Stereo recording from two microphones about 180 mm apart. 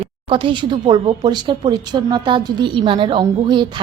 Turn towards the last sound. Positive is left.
turn(degrees=-25)  # may be behind; listen again after turning